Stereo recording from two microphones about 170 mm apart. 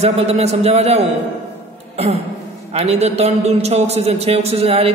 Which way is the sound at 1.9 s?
35° right (ahead or behind).